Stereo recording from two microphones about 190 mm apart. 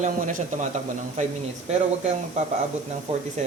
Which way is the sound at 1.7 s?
35° right (ahead or behind).